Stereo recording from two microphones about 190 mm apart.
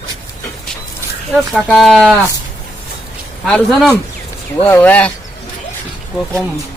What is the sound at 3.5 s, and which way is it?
Speech, 5° left (ahead or behind).